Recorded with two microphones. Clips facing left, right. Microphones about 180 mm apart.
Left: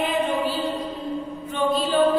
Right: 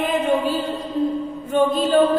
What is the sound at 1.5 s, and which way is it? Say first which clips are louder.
Mantra: right 5 dB; 45° right (ahead or behind).